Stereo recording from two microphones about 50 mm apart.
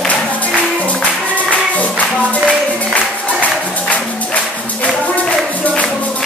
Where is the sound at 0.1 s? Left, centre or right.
Left.